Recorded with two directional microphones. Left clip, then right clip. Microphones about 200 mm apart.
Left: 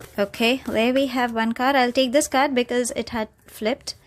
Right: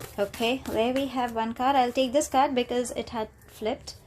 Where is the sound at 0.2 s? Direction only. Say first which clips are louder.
Left 6 dB; 40° left (ahead or behind).